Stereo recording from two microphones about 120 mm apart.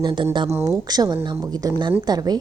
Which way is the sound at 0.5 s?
30° right (ahead or behind).